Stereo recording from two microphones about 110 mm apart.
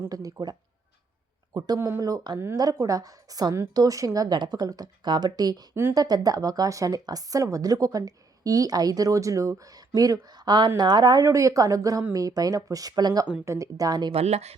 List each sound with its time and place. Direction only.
0.1 s speech: 35° right (ahead or behind)
1.5 s speech: 35° right (ahead or behind)
14.1 s speech: 75° right (ahead or behind)